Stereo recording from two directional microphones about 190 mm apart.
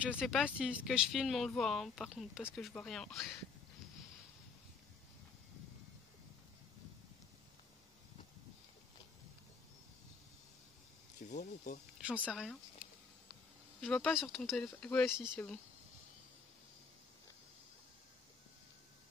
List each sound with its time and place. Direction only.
0.3 s speech: 5° right (ahead or behind)
11.2 s speech: 40° left (ahead or behind)
12.1 s speech: 5° right (ahead or behind)
13.7 s speech: 5° left (ahead or behind)